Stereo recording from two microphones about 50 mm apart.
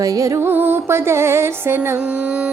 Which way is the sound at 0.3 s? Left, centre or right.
Right.